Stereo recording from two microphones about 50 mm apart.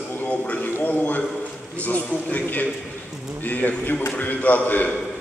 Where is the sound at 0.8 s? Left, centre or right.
Left.